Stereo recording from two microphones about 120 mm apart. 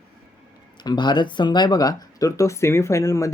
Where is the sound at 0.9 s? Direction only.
40° left (ahead or behind).